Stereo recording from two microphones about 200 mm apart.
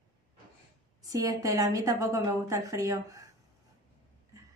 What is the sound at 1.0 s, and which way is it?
A woman's voice, 15° right (ahead or behind).